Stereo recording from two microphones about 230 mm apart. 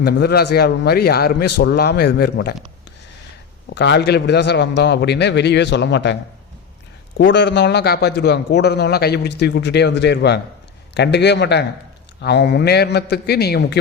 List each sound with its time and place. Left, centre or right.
0.0 s a man's voice: left
3.8 s a man's voice: left
7.2 s a man's voice: left